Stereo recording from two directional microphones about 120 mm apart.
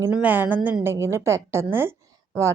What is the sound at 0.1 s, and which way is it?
A woman's voice, 15° right (ahead or behind).